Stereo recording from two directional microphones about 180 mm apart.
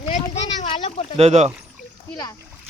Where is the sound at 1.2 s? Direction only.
35° right (ahead or behind).